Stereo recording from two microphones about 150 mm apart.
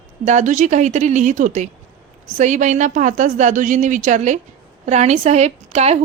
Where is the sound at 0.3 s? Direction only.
55° right (ahead or behind).